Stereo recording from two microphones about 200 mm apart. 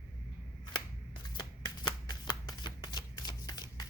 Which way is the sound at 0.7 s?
20° left (ahead or behind).